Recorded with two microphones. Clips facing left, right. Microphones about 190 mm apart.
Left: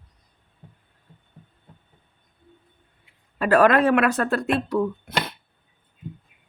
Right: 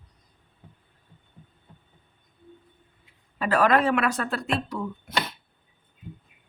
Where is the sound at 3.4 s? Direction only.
55° left (ahead or behind).